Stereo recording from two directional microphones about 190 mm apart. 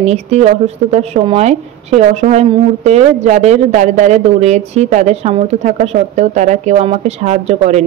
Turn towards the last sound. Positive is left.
turn(degrees=-35)  # may be behind; listen again after turning